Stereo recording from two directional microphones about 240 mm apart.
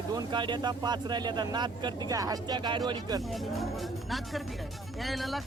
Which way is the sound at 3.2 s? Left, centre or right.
Centre.